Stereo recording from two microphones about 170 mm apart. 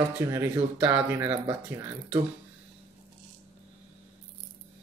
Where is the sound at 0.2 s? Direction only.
15° right (ahead or behind).